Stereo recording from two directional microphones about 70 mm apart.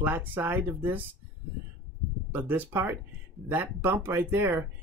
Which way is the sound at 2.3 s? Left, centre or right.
Right.